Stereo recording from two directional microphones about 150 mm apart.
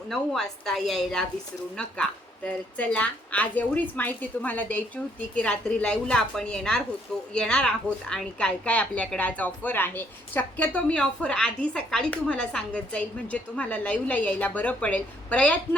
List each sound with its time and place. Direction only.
0.1 s a woman's voice: centre (ahead or behind)